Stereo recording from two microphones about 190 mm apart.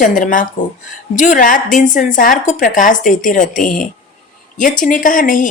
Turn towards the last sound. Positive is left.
turn(degrees=45)  # may be behind; listen again after turning